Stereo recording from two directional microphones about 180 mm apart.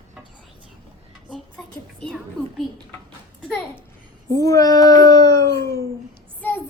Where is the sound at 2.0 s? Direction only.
Centre (ahead or behind).